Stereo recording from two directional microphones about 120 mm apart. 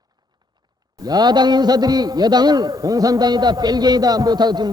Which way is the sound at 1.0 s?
35° right (ahead or behind).